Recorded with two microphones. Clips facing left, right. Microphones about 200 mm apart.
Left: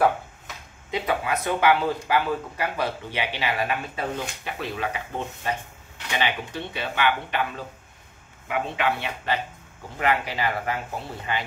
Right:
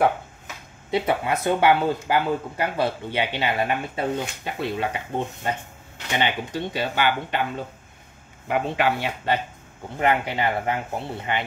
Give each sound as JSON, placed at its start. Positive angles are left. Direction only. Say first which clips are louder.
{"t": 0.9, "sound": "speech", "louder": "right 3 dB", "side_deg": -30}